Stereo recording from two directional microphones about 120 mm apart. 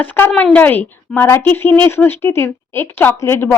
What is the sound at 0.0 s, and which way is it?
A woman's voice, 15° left (ahead or behind).